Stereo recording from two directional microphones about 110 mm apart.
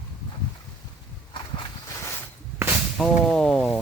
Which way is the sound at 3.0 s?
5° left (ahead or behind).